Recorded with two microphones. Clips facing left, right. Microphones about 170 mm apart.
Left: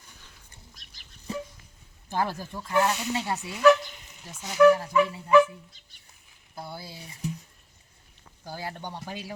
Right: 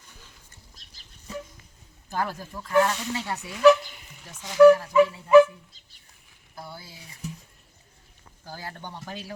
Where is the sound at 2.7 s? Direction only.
15° left (ahead or behind).